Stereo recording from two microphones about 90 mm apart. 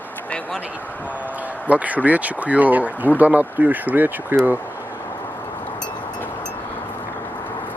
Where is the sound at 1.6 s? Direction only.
15° right (ahead or behind).